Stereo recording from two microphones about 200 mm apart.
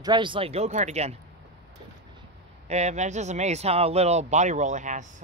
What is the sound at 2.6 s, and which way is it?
Speech, 35° right (ahead or behind).